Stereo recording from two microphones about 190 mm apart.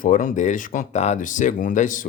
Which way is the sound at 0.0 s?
45° left (ahead or behind).